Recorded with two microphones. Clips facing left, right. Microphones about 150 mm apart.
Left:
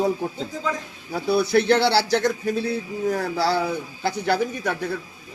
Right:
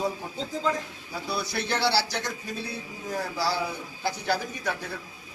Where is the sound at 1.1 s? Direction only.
60° left (ahead or behind).